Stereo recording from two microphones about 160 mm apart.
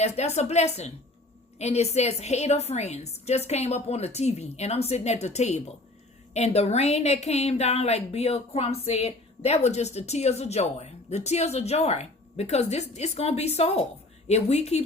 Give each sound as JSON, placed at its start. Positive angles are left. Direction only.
{"t": 0.0, "sound": "a woman's voice", "side_deg": 45}